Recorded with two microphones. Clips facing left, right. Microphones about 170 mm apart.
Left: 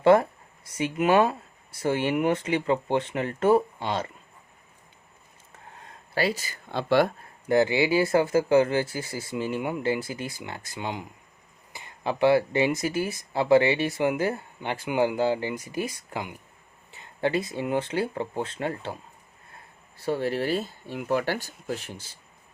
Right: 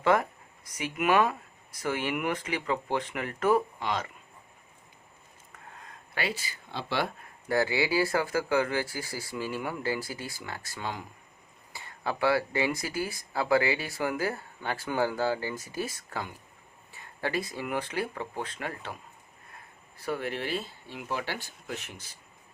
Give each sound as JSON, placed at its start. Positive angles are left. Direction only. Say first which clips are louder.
{"t": 0.0, "sound": "speech", "louder": "left 7 dB", "side_deg": 30}
{"t": 5.5, "sound": "a sound", "louder": "left 2 dB", "side_deg": 30}
{"t": 7.4, "sound": "speech", "louder": "left 5 dB", "side_deg": 20}
{"t": 20.0, "sound": "speech", "louder": "left 6 dB", "side_deg": 30}